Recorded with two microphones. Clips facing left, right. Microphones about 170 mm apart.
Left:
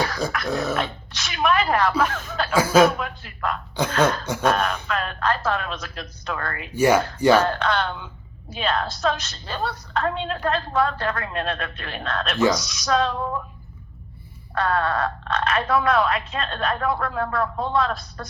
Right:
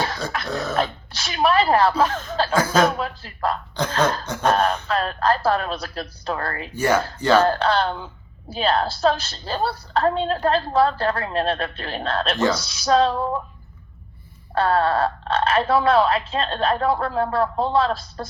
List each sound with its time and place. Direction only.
0.4 s speech: 10° left (ahead or behind)
0.8 s a woman's voice: 35° right (ahead or behind)
2.3 s cough: 30° right (ahead or behind)
2.6 s speech: 10° left (ahead or behind)
3.0 s a woman's voice: 35° right (ahead or behind)
4.3 s speech: 10° left (ahead or behind)
4.5 s a woman's voice: 30° right (ahead or behind)
6.7 s speech: 10° left (ahead or behind)
7.4 s a woman's voice: 30° right (ahead or behind)
14.5 s a woman's voice: 30° right (ahead or behind)